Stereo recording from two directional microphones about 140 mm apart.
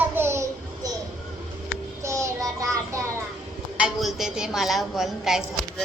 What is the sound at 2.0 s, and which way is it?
Child singing, 20° right (ahead or behind).